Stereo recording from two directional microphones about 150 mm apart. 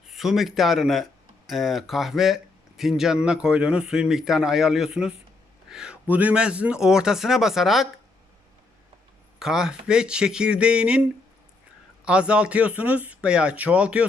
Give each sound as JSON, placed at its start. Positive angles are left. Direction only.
{"t": 0.1, "sound": "speech", "side_deg": 0}
{"t": 9.4, "sound": "speech", "side_deg": -5}
{"t": 12.0, "sound": "speech", "side_deg": -5}